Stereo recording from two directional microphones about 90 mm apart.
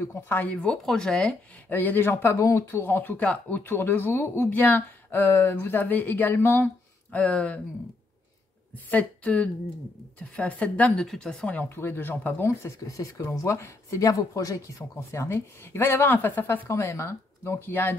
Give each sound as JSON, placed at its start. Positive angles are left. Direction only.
{"t": 0.0, "sound": "speech", "side_deg": 25}
{"t": 0.6, "sound": "a woman's voice", "side_deg": 10}
{"t": 1.7, "sound": "speech", "side_deg": 20}
{"t": 2.4, "sound": "speech", "side_deg": 35}
{"t": 8.7, "sound": "a woman's voice", "side_deg": 15}
{"t": 11.7, "sound": "speech", "side_deg": 25}
{"t": 12.4, "sound": "speech", "side_deg": 35}